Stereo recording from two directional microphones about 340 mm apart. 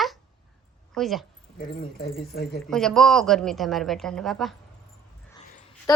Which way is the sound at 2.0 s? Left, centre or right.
Left.